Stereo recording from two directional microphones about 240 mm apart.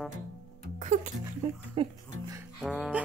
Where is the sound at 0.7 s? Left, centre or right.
Right.